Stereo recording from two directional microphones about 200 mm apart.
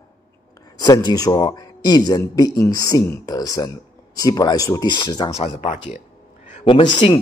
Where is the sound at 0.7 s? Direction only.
20° left (ahead or behind).